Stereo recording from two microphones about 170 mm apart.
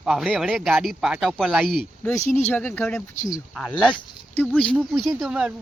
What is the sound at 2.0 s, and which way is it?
Speech, 10° left (ahead or behind).